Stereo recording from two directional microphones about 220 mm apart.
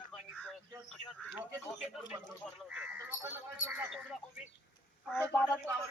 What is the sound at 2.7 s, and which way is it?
Crow, 5° right (ahead or behind).